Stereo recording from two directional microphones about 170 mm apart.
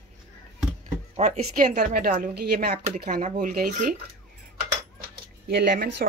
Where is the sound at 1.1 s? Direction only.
45° right (ahead or behind); by 2.7 s 70° right (ahead or behind).